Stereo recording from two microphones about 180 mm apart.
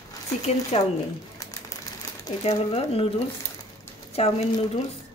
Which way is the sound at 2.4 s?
35° left (ahead or behind).